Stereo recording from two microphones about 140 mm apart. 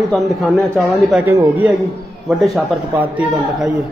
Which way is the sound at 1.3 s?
15° right (ahead or behind).